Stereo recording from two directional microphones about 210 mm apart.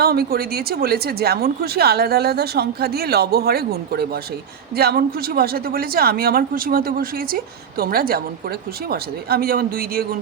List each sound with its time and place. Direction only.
0.0 s speech: 45° right (ahead or behind)